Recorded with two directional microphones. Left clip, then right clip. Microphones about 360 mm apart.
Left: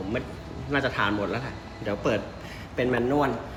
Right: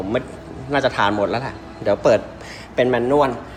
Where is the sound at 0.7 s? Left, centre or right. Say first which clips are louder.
Right 7 dB; centre.